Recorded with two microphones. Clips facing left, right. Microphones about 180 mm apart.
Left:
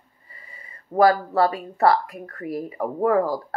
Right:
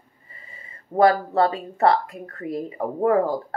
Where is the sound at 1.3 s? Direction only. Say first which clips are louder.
Even; 25° right (ahead or behind).